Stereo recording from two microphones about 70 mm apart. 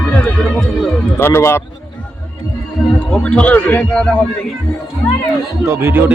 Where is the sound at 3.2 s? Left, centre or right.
Centre.